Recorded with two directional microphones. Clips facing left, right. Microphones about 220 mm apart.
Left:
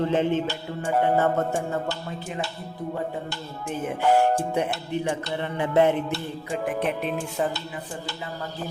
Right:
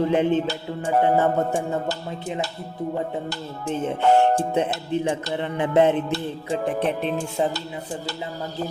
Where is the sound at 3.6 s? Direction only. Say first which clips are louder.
Right 3 dB; 25° right (ahead or behind).